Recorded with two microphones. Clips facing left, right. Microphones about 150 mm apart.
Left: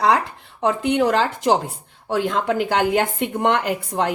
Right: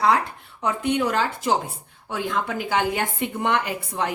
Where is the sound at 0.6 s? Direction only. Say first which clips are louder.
Left 4 dB; 70° left (ahead or behind).